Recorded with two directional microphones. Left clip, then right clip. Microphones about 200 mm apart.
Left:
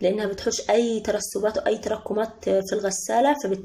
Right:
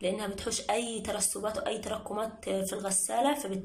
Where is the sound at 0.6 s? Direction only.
60° left (ahead or behind).